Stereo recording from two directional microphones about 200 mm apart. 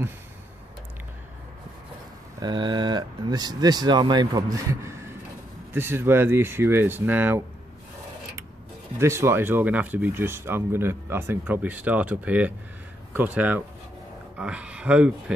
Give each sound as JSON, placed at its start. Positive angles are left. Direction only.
{"t": 2.4, "sound": "speech", "side_deg": -20}
{"t": 9.0, "sound": "speech", "side_deg": -15}